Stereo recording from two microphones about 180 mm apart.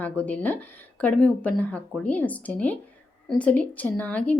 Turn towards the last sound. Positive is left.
turn(degrees=10)  # may be behind; listen again after turning